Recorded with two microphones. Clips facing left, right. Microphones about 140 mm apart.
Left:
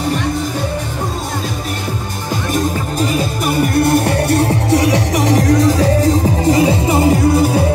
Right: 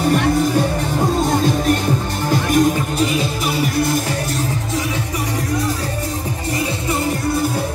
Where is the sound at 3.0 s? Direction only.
45° left (ahead or behind); by 7.6 s 90° left.